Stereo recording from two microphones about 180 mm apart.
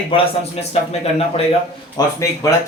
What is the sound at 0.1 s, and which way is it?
Speech, 30° left (ahead or behind).